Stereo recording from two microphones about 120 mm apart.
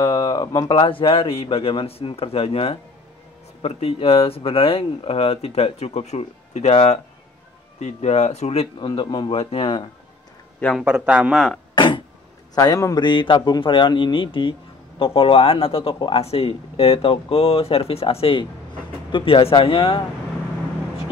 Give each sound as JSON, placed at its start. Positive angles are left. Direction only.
{"t": 0.0, "sound": "a sound", "side_deg": 30}
{"t": 0.7, "sound": "speech", "side_deg": 45}
{"t": 8.7, "sound": "speech", "side_deg": 40}
{"t": 9.4, "sound": "speech", "side_deg": 55}
{"t": 10.8, "sound": "a man's voice", "side_deg": -10}
{"t": 11.7, "sound": "a sound", "side_deg": 45}
{"t": 12.5, "sound": "speech", "side_deg": 30}